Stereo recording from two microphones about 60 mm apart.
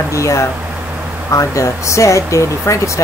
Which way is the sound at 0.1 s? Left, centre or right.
Left.